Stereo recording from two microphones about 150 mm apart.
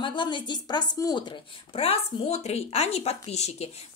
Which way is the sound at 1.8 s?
40° left (ahead or behind).